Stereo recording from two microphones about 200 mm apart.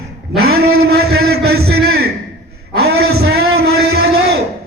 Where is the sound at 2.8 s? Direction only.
55° right (ahead or behind).